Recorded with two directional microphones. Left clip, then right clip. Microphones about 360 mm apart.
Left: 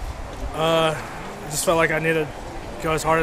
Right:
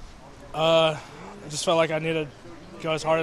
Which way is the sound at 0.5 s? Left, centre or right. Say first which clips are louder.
Even; right.